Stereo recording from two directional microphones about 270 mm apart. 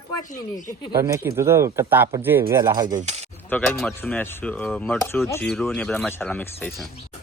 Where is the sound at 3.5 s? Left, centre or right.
Centre.